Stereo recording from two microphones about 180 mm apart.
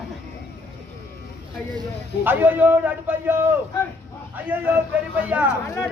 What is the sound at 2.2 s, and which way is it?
Speech, 10° right (ahead or behind).